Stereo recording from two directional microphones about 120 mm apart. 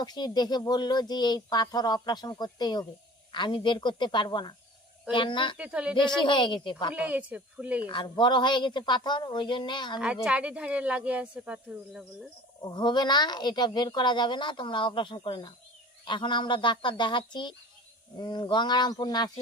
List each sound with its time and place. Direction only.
0.0 s speech: 35° left (ahead or behind)
5.5 s speech: 10° right (ahead or behind)
6.2 s speech: 40° left (ahead or behind)
6.9 s speech: 10° right (ahead or behind)
7.9 s speech: 40° left (ahead or behind)
10.2 s speech: 10° right (ahead or behind)
12.6 s speech: 40° left (ahead or behind)